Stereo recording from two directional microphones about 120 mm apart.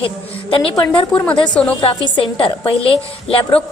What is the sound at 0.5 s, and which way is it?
Speech, 45° left (ahead or behind).